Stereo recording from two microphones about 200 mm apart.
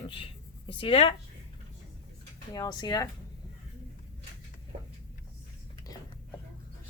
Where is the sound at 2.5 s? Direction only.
20° left (ahead or behind).